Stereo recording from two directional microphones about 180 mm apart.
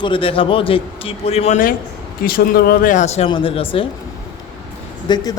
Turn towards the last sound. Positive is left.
turn(degrees=25)  # may be behind; listen again after turning